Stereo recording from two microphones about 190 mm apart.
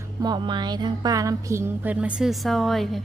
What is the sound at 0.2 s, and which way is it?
Music, 20° right (ahead or behind).